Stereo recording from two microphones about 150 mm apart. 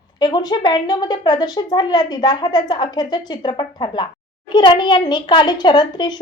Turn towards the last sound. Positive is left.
turn(degrees=30)  # may be behind; listen again after turning